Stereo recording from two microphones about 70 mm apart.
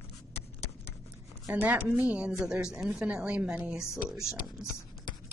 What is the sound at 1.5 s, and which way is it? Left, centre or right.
Speech, right.